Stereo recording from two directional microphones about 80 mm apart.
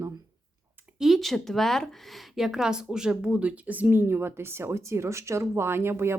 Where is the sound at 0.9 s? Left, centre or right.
Centre.